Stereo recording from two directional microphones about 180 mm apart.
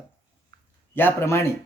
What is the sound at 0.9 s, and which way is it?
Speech, 15° left (ahead or behind).